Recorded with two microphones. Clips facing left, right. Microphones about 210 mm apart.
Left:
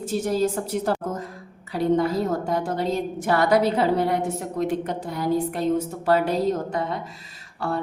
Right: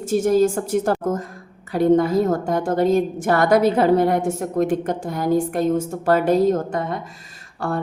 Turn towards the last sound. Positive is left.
turn(degrees=-50)  # may be behind; listen again after turning